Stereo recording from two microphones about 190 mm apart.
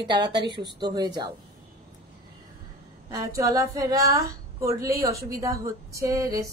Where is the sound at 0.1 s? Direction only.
25° right (ahead or behind).